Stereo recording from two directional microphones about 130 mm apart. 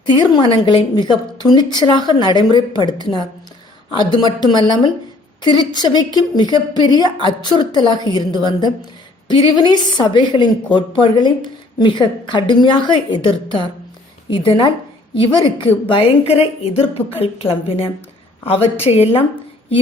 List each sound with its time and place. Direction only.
0.0 s a woman's voice: 35° left (ahead or behind)